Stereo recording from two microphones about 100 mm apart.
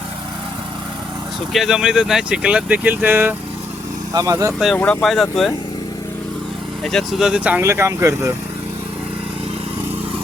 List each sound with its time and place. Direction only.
1.5 s speech: 5° right (ahead or behind); by 3.3 s 20° right (ahead or behind)
4.1 s speech: 35° right (ahead or behind)
4.8 s speech: 10° left (ahead or behind)
6.8 s speech: centre (ahead or behind)
7.6 s speech: 30° right (ahead or behind)